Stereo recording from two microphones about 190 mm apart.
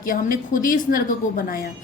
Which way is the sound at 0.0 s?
45° left (ahead or behind).